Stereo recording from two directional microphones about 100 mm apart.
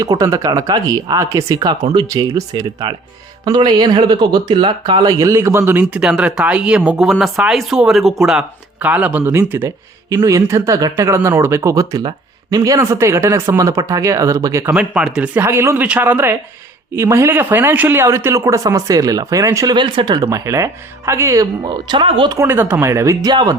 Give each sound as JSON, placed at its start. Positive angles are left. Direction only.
{"t": 0.0, "sound": "speech", "side_deg": -35}
{"t": 5.1, "sound": "speech", "side_deg": -30}
{"t": 6.0, "sound": "speech", "side_deg": -10}
{"t": 10.2, "sound": "speech", "side_deg": -35}
{"t": 14.8, "sound": "speech", "side_deg": -10}
{"t": 15.4, "sound": "speech", "side_deg": -25}
{"t": 19.7, "sound": "speech", "side_deg": -50}
{"t": 20.3, "sound": "speech", "side_deg": -35}
{"t": 21.7, "sound": "speech", "side_deg": -50}
{"t": 22.0, "sound": "speech", "side_deg": -60}
{"t": 22.3, "sound": "speech", "side_deg": -25}
{"t": 23.3, "sound": "speech", "side_deg": -45}